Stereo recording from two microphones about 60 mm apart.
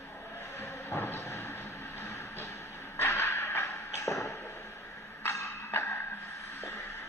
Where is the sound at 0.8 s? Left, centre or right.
Left.